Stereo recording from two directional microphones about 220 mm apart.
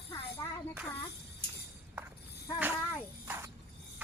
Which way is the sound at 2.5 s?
10° right (ahead or behind).